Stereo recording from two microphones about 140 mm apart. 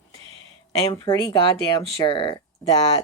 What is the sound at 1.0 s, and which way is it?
Speech, 25° left (ahead or behind).